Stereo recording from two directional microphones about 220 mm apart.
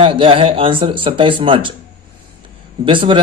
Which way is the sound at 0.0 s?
25° right (ahead or behind).